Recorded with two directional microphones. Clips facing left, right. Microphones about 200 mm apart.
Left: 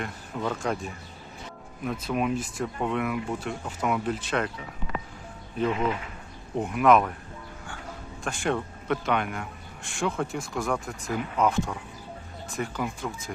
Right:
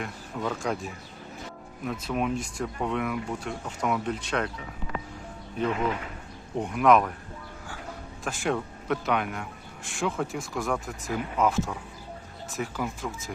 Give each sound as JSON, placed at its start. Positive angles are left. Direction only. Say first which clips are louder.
{"t": 0.0, "sound": "speech", "louder": "left 1 dB", "side_deg": 0}
{"t": 6.6, "sound": "speech", "louder": "left 1 dB", "side_deg": 0}
{"t": 8.2, "sound": "speech", "louder": "left 1 dB", "side_deg": 0}